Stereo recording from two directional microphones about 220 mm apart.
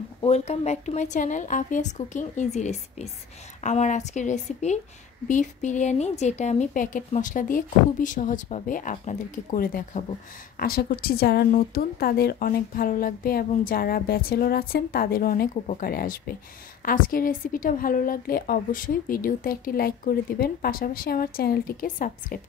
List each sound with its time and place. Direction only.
0.2 s a woman's voice: 30° left (ahead or behind)